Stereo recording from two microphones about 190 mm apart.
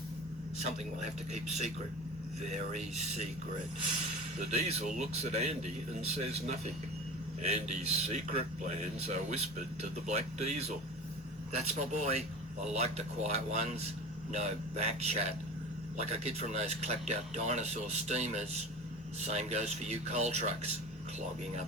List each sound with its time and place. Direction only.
1.3 s speech: 35° right (ahead or behind)
4.4 s speech: 35° right (ahead or behind)